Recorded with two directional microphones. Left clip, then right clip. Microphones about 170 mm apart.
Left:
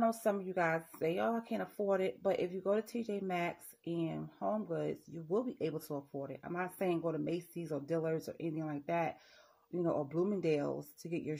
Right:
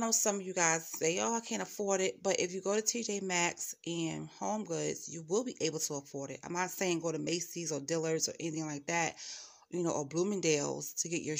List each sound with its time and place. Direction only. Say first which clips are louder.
0.0 s speech: even; 30° right (ahead or behind)
4.6 s speech: right 1 dB; 30° right (ahead or behind)